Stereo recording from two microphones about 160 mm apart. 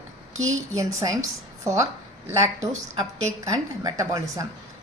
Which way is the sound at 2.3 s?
20° right (ahead or behind).